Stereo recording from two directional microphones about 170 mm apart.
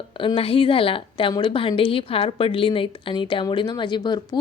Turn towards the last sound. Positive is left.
turn(degrees=25)  # may be behind; listen again after turning